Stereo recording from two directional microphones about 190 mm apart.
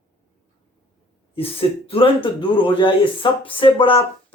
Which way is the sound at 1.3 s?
30° left (ahead or behind).